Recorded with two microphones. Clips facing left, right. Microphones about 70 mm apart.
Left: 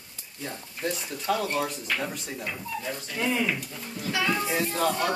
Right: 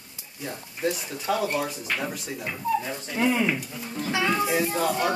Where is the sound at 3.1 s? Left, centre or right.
Right.